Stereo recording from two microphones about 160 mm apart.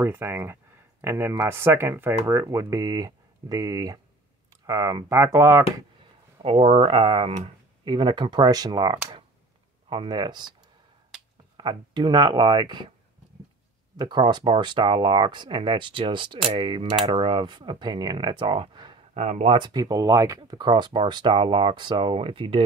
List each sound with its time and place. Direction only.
0.0 s speech: 15° right (ahead or behind)
6.4 s speech: 35° right (ahead or behind)
11.5 s speech: 30° right (ahead or behind)
13.9 s speech: 30° right (ahead or behind)
19.1 s speech: 45° right (ahead or behind)
19.5 s speech: 25° right (ahead or behind)